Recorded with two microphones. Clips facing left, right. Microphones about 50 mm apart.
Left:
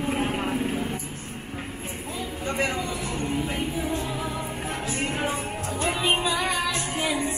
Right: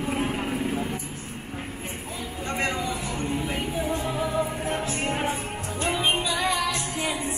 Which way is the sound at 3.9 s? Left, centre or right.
Right.